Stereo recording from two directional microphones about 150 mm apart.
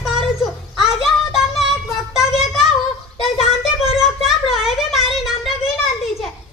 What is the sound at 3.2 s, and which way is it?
Child singing, 40° left (ahead or behind).